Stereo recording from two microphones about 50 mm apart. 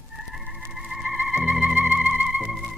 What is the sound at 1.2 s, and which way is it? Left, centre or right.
Theremin, centre.